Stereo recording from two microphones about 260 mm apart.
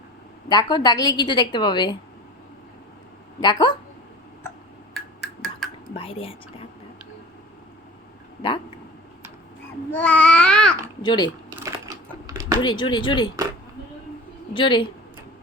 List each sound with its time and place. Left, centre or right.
0.4 s a woman's voice: centre
3.4 s a woman's voice: centre
5.4 s a sound: centre
5.9 s speech: left
9.9 s babbling: centre
11.0 s a woman's voice: centre
12.2 s typing: centre
12.6 s a woman's voice: centre
14.5 s a woman's voice: centre